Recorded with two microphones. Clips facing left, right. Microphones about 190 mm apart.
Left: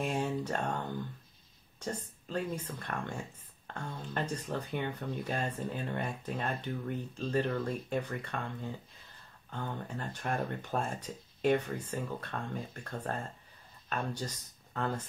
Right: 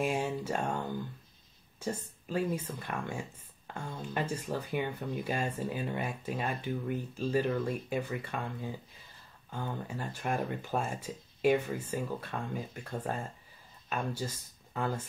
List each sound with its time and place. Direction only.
0.0 s speech: 5° right (ahead or behind)